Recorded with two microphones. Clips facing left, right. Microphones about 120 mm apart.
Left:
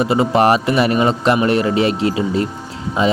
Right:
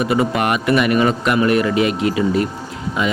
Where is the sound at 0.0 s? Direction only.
30° left (ahead or behind).